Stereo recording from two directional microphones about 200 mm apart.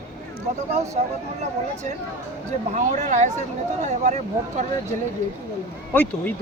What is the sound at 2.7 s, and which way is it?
Speech, 35° right (ahead or behind).